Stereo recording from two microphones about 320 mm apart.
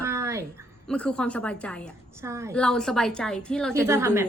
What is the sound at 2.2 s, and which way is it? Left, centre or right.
Speech, centre.